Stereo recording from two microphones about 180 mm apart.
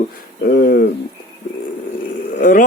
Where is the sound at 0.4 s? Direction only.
60° left (ahead or behind).